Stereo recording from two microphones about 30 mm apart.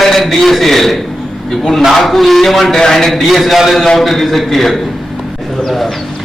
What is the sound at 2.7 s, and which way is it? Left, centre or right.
Speech, centre.